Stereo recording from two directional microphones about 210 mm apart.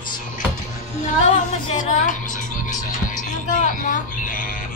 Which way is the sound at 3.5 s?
40° left (ahead or behind).